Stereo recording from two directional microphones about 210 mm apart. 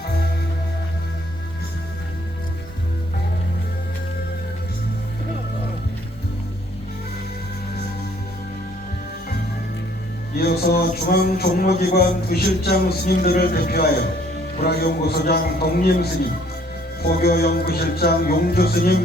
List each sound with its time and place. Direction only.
10.3 s speech: 50° left (ahead or behind)
17.0 s speech: 45° left (ahead or behind)